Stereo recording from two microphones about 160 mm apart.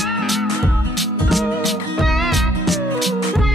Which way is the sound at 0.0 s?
Centre (ahead or behind).